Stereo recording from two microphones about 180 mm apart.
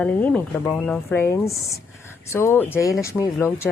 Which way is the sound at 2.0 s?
15° left (ahead or behind).